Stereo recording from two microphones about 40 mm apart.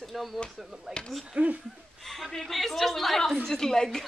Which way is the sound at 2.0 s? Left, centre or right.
Centre.